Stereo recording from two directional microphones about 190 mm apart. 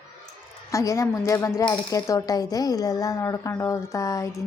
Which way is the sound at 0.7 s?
15° left (ahead or behind).